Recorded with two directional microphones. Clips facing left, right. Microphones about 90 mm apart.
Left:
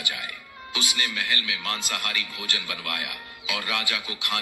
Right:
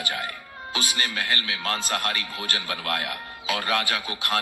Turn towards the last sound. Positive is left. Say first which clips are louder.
# right 3 dB
turn(degrees=-40)  # may be behind; listen again after turning